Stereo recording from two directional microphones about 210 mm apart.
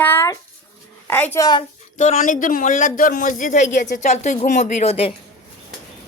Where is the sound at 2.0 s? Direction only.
35° left (ahead or behind).